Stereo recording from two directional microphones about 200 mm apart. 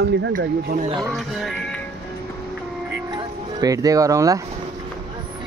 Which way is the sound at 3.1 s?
20° right (ahead or behind).